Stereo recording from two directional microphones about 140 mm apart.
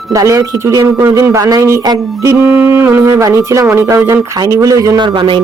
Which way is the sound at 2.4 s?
10° right (ahead or behind).